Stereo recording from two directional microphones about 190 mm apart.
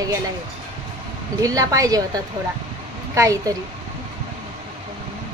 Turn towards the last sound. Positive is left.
turn(degrees=-15)  # may be behind; listen again after turning